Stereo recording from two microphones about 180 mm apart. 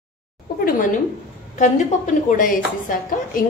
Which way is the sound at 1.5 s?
45° left (ahead or behind).